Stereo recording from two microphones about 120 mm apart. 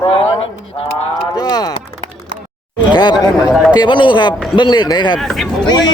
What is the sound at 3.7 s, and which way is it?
Speech, 40° left (ahead or behind).